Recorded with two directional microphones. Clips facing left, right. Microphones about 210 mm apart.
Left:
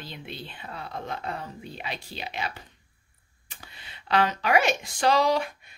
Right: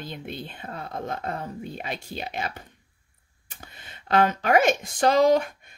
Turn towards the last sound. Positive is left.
turn(degrees=-45)  # may be behind; listen again after turning